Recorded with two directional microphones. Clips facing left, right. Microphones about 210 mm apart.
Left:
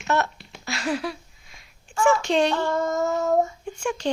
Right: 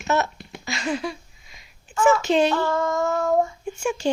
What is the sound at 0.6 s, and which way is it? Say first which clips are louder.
Speech: even; centre (ahead or behind).